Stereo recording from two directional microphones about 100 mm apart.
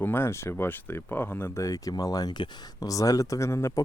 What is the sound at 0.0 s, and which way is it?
Speech, 20° left (ahead or behind).